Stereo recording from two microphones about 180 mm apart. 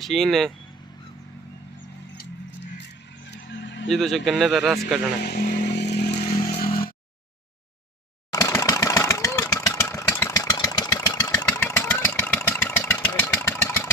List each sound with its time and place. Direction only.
0.0 s speech: centre (ahead or behind)
3.2 s vehicle: 80° left
3.8 s speech: centre (ahead or behind)
5.2 s speech: 55° left (ahead or behind)
5.7 s vehicle: 70° left (ahead or behind)
6.6 s a sound: 55° left (ahead or behind)
8.3 s engine: 20° left (ahead or behind)